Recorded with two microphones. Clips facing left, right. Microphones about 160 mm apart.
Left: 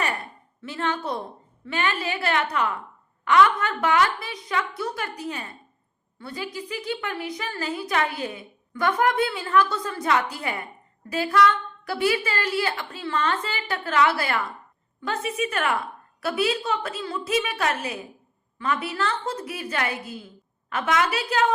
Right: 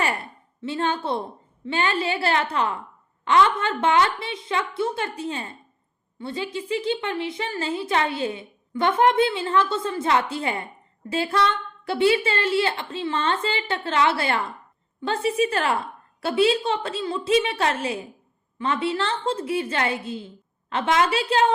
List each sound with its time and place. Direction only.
0.6 s a woman's voice: 30° right (ahead or behind)